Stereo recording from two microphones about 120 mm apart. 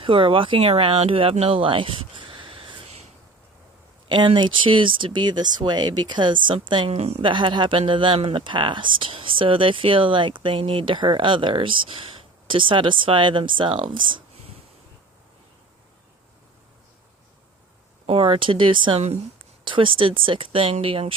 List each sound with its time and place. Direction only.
0.0 s speech: 45° right (ahead or behind)
4.1 s speech: 40° right (ahead or behind)
6.9 s a woman's voice: 60° right (ahead or behind)
7.3 s speech: 40° right (ahead or behind)
18.0 s speech: 50° right (ahead or behind)
18.9 s a woman's voice: 65° right (ahead or behind)
19.6 s speech: 45° right (ahead or behind)